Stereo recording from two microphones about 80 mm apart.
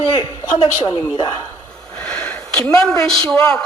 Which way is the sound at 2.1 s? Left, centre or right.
Centre.